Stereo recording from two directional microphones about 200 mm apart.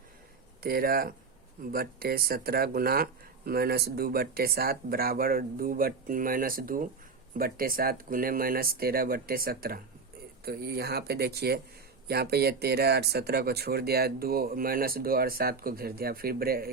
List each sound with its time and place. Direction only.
0.6 s speech: 50° right (ahead or behind)